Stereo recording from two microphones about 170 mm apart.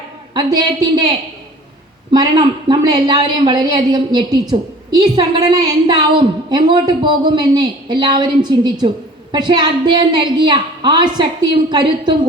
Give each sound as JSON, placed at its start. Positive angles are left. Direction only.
{"t": 0.3, "sound": "a woman's voice", "side_deg": -25}
{"t": 2.1, "sound": "a woman's voice", "side_deg": -25}